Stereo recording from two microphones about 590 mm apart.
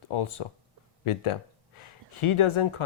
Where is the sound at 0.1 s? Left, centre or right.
Left.